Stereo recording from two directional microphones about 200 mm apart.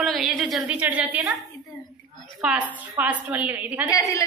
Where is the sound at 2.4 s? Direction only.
5° right (ahead or behind).